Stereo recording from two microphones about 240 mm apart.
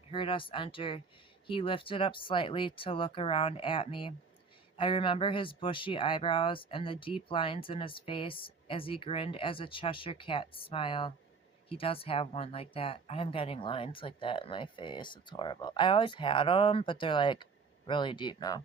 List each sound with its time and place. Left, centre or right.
0.1 s speech: left